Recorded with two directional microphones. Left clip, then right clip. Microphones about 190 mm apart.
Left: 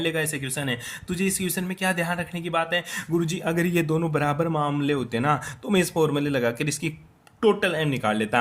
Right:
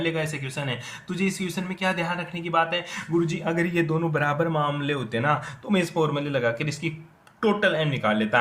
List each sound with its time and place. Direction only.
0.0 s speech: 45° left (ahead or behind)